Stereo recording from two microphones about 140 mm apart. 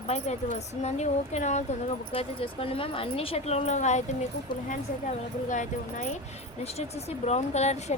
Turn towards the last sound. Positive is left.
turn(degrees=50)  # may be behind; listen again after turning